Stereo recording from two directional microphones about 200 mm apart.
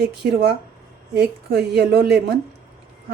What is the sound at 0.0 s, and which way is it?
Speech, 55° right (ahead or behind).